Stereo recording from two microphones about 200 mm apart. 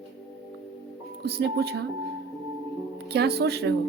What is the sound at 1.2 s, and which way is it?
Speech, 55° right (ahead or behind).